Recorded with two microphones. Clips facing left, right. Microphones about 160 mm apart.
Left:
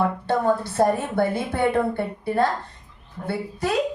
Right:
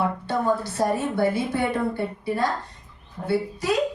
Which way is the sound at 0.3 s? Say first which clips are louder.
Left 3 dB; 55° left (ahead or behind).